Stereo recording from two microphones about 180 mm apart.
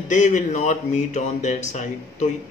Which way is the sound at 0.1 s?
45° left (ahead or behind).